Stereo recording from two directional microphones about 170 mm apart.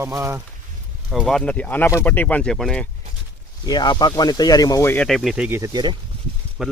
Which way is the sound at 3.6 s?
25° left (ahead or behind).